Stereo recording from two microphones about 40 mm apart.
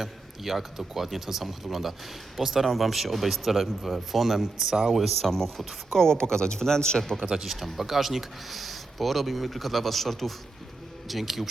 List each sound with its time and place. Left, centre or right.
0.0 s speech: centre
5.3 s speech: centre
7.0 s speech: centre
7.3 s speech: centre